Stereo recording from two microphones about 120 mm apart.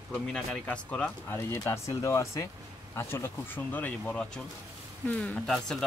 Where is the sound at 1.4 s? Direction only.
20° left (ahead or behind).